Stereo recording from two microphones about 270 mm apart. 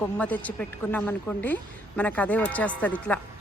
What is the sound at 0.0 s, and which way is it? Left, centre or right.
A woman's voice, centre.